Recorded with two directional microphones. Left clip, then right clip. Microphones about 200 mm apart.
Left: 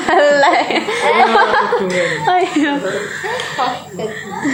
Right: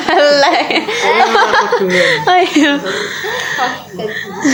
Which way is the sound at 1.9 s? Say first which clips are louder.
Right 4 dB; 50° right (ahead or behind).